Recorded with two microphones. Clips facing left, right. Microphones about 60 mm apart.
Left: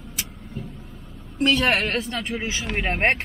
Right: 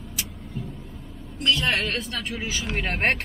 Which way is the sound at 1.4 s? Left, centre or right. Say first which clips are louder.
Left 4 dB; left.